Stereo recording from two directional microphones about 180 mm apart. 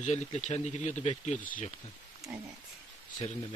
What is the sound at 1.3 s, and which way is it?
Speech, 10° left (ahead or behind).